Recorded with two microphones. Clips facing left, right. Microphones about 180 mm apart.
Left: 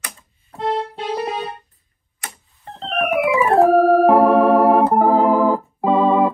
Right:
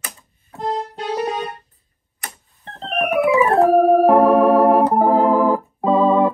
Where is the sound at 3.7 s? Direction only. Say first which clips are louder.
Right 1 dB; centre (ahead or behind).